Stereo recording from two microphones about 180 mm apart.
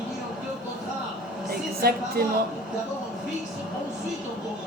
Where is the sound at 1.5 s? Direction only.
60° right (ahead or behind).